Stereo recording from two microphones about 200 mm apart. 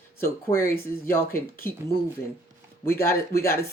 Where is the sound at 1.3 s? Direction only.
50° left (ahead or behind).